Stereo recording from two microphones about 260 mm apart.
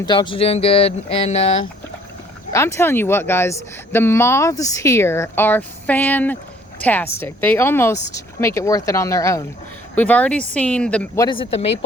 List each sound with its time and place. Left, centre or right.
0.0 s speech: centre
2.5 s a woman's voice: centre